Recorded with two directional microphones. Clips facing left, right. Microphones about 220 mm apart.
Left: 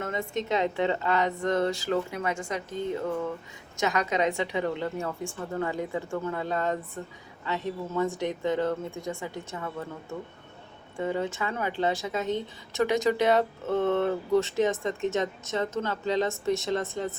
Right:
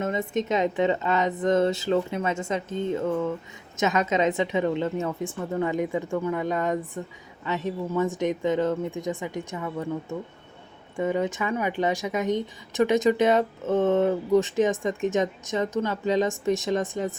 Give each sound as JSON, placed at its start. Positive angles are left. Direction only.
{"t": 0.0, "sound": "a woman's voice", "side_deg": -20}
{"t": 10.9, "sound": "speech", "side_deg": -15}